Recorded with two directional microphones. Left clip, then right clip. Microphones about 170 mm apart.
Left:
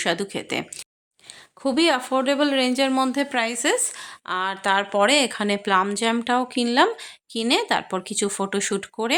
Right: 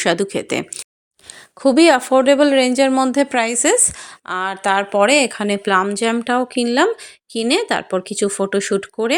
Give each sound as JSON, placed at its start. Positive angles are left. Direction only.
{"t": 0.0, "sound": "speech", "side_deg": -30}